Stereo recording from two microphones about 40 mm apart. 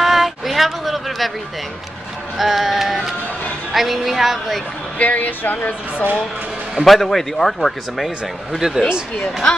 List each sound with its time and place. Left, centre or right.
0.0 s a sound: centre
2.3 s music: centre
4.9 s speech: left
6.8 s speech: centre
8.5 s speech: centre
9.2 s speech: centre